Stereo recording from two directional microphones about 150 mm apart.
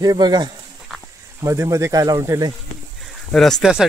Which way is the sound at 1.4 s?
20° right (ahead or behind).